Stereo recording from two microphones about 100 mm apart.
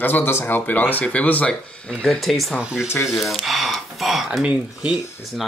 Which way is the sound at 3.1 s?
Centre (ahead or behind).